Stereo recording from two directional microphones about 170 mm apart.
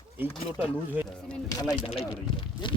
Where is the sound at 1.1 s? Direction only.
5° left (ahead or behind).